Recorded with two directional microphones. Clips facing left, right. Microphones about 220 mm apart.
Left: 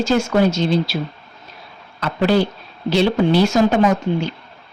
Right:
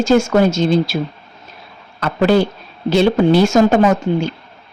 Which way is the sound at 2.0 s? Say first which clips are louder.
Right 3 dB; 50° right (ahead or behind).